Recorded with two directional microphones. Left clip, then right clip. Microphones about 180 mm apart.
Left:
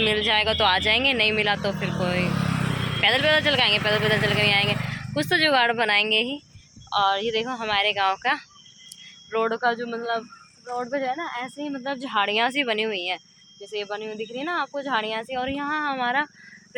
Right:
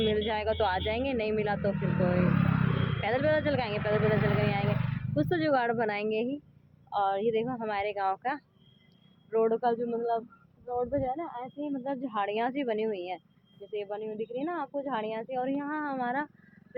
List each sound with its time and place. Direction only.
0.0 s speech: 10° left (ahead or behind)
2.5 s vehicle: 65° left (ahead or behind)
3.0 s speech: 5° left (ahead or behind)
10.8 s speech: 20° left (ahead or behind)
11.2 s speech: 35° left (ahead or behind)
11.6 s speech: 25° left (ahead or behind)